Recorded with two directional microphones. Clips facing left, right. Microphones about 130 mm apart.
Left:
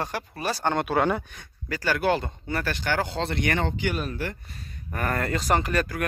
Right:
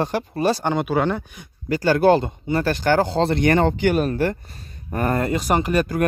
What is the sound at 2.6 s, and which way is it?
Speech, 40° right (ahead or behind).